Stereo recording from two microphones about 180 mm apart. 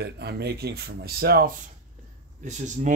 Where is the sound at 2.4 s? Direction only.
45° right (ahead or behind).